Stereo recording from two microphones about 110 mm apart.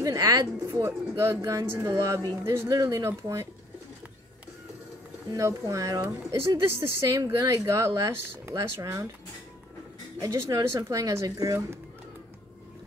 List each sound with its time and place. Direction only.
0.0 s speech: 35° right (ahead or behind)
5.3 s speech: 30° right (ahead or behind)
10.2 s speech: 30° right (ahead or behind)